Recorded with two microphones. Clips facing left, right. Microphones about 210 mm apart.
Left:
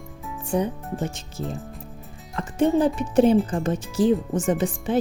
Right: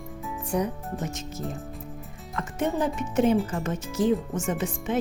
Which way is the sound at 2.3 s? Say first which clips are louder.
Left 7 dB; 30° left (ahead or behind).